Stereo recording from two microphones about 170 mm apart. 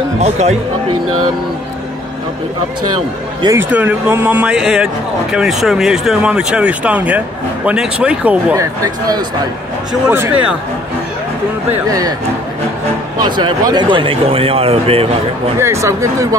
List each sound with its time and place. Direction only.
0.2 s speech: 40° right (ahead or behind)
3.4 s speech: 10° right (ahead or behind)
8.5 s speech: 20° right (ahead or behind)
10.0 s speech: 10° right (ahead or behind)
11.7 s speech: 20° right (ahead or behind)
13.2 s speech: 25° right (ahead or behind)
15.6 s speech: 15° right (ahead or behind)